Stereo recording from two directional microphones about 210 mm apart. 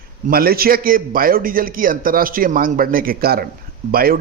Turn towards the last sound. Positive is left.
turn(degrees=-45)  # may be behind; listen again after turning